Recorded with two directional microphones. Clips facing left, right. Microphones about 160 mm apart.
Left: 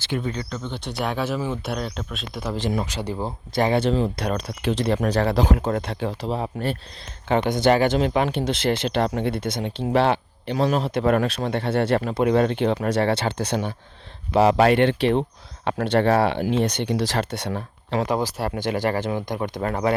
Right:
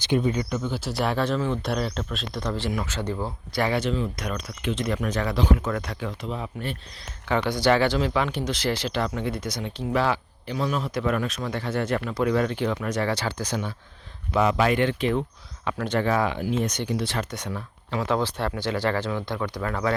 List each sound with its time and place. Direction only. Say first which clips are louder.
0.0 s speech: right 4 dB; 20° right (ahead or behind); by 2.6 s 5° left (ahead or behind)
2.6 s speech: left 3 dB; 20° left (ahead or behind); by 6.7 s 40° left (ahead or behind)
7.3 s speech: left 3 dB; 20° left (ahead or behind)
7.9 s speech: left 3 dB; 55° left (ahead or behind)
8.3 s speech: left 4 dB; 25° left (ahead or behind)
8.9 s speech: left 5 dB; 60° left (ahead or behind)
9.3 s speech: left 4 dB; 30° left (ahead or behind)
9.9 s a man's voice: left 4 dB; 65° left (ahead or behind)
11.9 s speech: left 2 dB; 30° left (ahead or behind)
14.3 s speech: left 5 dB; 65° left (ahead or behind)
16.8 s speech: left 4 dB; 85° left
17.5 s speech: left 5 dB; 60° left (ahead or behind)
18.1 s speech: left 1 dB; 10° left (ahead or behind)